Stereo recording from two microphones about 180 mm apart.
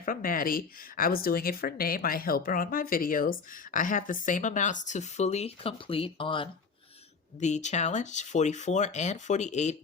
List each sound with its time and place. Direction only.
0.0 s speech: 50° left (ahead or behind); by 6.5 s 30° left (ahead or behind)
7.3 s speech: 40° left (ahead or behind)